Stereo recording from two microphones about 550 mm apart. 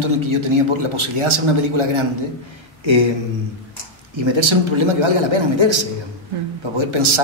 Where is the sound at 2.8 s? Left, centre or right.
Right.